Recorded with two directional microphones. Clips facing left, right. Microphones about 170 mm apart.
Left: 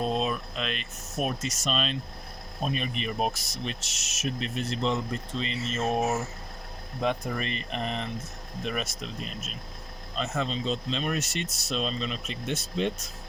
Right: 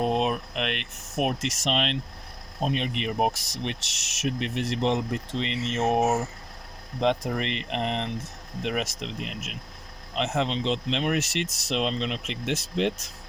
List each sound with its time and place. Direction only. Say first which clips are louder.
0.0 s speech: right 3 dB; 65° right (ahead or behind)